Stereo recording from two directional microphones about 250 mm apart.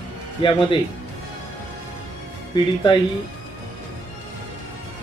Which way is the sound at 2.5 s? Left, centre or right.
Centre.